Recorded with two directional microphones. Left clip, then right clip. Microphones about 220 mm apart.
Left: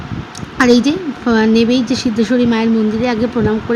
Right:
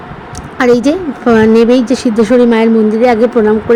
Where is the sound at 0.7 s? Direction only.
10° right (ahead or behind).